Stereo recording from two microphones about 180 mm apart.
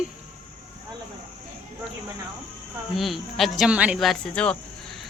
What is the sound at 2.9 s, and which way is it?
Speech, centre (ahead or behind).